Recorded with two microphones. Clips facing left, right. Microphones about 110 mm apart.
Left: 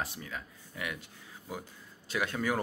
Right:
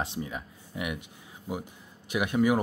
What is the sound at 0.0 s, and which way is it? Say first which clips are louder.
Speech: right 5 dB; 25° right (ahead or behind).